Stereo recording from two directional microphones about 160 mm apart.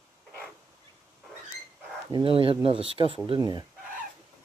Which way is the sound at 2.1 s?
30° right (ahead or behind).